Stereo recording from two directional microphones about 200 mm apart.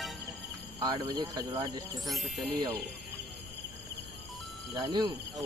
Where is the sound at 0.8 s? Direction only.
15° right (ahead or behind).